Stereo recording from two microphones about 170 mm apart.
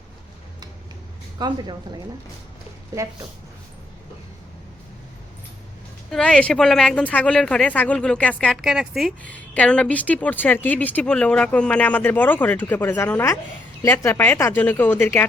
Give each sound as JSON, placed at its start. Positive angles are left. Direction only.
{"t": 1.4, "sound": "speech", "side_deg": -25}
{"t": 6.1, "sound": "speech", "side_deg": 5}